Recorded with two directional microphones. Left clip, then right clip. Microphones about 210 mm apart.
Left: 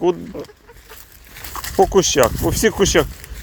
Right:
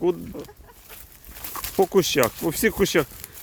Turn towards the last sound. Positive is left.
turn(degrees=5)  # may be behind; listen again after turning